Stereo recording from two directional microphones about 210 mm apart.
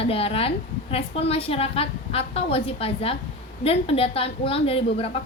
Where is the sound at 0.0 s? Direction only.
25° left (ahead or behind).